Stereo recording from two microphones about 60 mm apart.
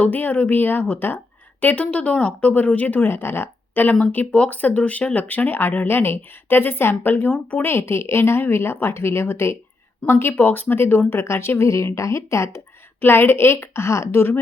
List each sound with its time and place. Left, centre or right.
0.0 s speech: left
1.6 s speech: left
3.1 s speech: left
13.0 s speech: left